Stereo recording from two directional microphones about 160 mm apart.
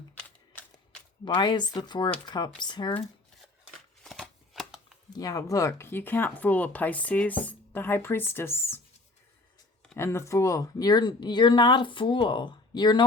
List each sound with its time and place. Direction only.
1.2 s speech: 30° left (ahead or behind)
4.0 s shuffling cards: centre (ahead or behind)
5.1 s speech: 20° left (ahead or behind)
9.9 s speech: 15° left (ahead or behind)